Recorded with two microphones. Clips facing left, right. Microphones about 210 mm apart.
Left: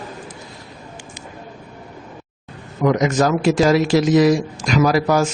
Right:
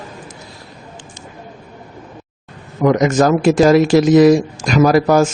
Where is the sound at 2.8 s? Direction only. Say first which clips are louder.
Right 4 dB; 50° right (ahead or behind).